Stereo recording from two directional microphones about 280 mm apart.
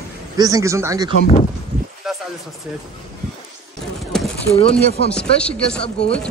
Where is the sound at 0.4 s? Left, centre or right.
Centre.